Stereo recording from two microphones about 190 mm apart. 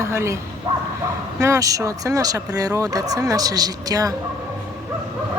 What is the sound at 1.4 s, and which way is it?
Speech, 15° right (ahead or behind).